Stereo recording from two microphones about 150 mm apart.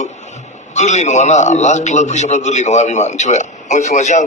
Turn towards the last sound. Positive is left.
turn(degrees=50)  # may be behind; listen again after turning